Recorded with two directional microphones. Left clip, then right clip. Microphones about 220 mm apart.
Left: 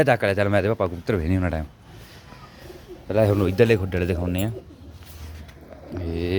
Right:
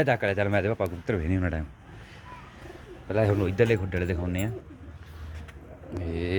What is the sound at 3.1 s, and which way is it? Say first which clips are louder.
Speech: left 5 dB; 10° left (ahead or behind).